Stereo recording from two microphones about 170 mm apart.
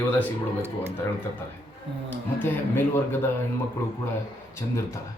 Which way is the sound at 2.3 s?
10° left (ahead or behind).